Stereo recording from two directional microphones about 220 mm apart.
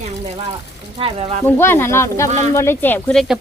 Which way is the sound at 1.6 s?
10° left (ahead or behind).